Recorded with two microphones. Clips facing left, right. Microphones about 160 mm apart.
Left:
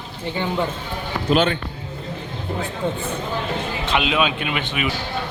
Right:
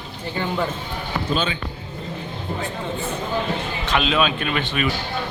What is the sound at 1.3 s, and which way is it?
Speech, 70° left (ahead or behind).